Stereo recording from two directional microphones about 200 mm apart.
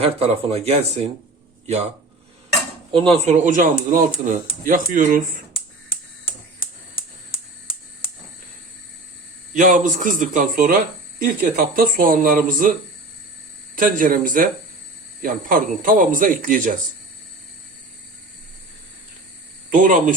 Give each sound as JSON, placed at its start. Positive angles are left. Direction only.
{"t": 0.0, "sound": "speech", "side_deg": -30}
{"t": 2.9, "sound": "speech", "side_deg": -25}
{"t": 9.6, "sound": "speech", "side_deg": -40}
{"t": 13.7, "sound": "speech", "side_deg": -45}
{"t": 19.7, "sound": "speech", "side_deg": -40}